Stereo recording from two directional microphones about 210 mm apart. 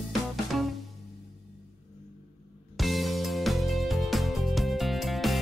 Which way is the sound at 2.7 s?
Centre (ahead or behind).